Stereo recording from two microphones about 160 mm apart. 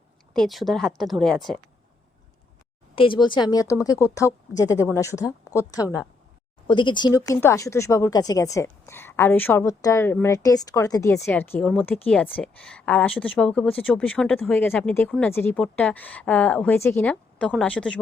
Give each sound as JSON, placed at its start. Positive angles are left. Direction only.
{"t": 0.3, "sound": "a woman's voice", "side_deg": 0}
{"t": 2.9, "sound": "a woman's voice", "side_deg": 35}
{"t": 11.6, "sound": "a woman's voice", "side_deg": 0}